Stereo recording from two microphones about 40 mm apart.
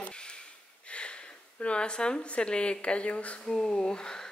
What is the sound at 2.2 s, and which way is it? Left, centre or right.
A woman's voice, left.